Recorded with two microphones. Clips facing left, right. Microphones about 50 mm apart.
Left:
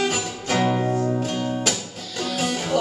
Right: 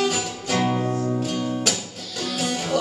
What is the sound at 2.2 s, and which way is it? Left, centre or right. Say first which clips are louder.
Music: left 1 dB; left.